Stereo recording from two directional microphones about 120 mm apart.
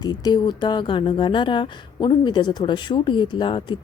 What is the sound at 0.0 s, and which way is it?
Speech, 35° left (ahead or behind).